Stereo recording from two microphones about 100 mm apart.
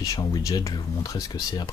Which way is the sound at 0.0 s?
40° left (ahead or behind).